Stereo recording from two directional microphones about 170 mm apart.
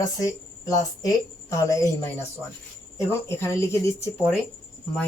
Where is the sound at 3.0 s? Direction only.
15° left (ahead or behind).